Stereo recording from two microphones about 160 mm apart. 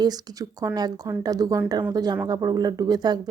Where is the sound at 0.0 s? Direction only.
25° right (ahead or behind).